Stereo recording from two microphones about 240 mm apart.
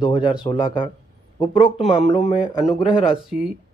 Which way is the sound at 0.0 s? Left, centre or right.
Centre.